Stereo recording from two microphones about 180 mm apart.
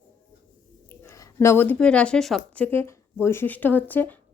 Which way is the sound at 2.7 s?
10° left (ahead or behind).